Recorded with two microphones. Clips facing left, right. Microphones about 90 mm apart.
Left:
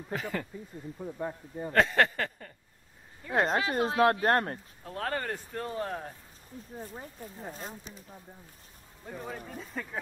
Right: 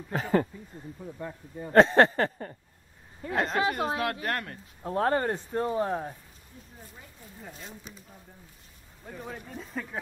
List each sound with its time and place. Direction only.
0.1 s a sound: 35° right (ahead or behind)
0.9 s speech: 15° left (ahead or behind)
1.7 s a sound: 30° right (ahead or behind)
3.3 s speech: 30° left (ahead or behind)
4.8 s speech: 30° right (ahead or behind)
6.8 s speech: 35° left (ahead or behind)
9.0 s speech: centre (ahead or behind)